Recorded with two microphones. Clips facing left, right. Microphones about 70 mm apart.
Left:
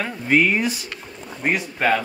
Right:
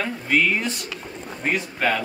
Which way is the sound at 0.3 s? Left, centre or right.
Left.